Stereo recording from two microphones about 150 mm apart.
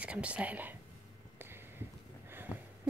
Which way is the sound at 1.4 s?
15° right (ahead or behind).